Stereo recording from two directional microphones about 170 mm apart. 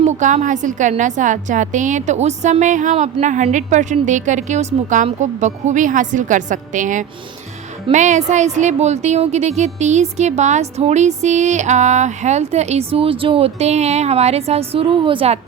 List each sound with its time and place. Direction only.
0.0 s a woman's voice: 45° right (ahead or behind)